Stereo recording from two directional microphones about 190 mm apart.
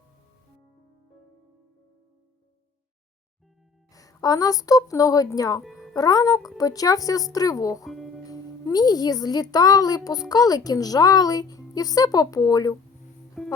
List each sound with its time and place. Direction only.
3.9 s speech: 20° left (ahead or behind)
5.6 s music: centre (ahead or behind)
5.9 s speech: 20° left (ahead or behind)
7.9 s music: centre (ahead or behind)
8.3 s speech: 20° left (ahead or behind)
13.4 s music: centre (ahead or behind)